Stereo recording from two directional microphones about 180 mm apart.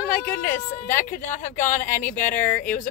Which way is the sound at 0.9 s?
45° left (ahead or behind).